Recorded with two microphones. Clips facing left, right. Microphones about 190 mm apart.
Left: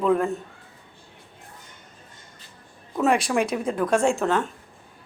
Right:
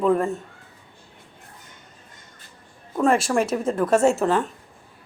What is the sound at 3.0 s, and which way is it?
A woman's voice, centre (ahead or behind).